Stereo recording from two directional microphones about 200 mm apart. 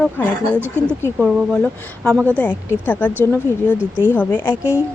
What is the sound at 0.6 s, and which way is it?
A woman's voice, 10° right (ahead or behind).